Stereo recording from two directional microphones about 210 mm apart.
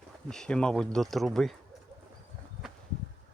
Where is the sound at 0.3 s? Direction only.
5° left (ahead or behind).